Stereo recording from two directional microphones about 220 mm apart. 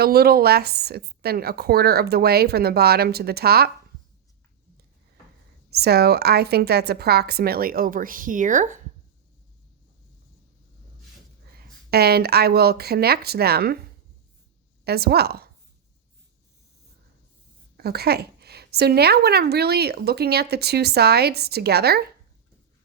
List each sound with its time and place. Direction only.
0.0 s a woman's voice: 45° right (ahead or behind)
5.7 s a woman's voice: 45° right (ahead or behind)
11.5 s a woman's voice: 45° right (ahead or behind)
14.8 s a woman's voice: 45° right (ahead or behind)
17.7 s a woman's voice: 45° right (ahead or behind)